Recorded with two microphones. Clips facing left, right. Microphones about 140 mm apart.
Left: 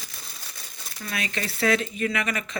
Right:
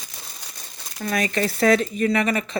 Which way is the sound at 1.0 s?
40° right (ahead or behind).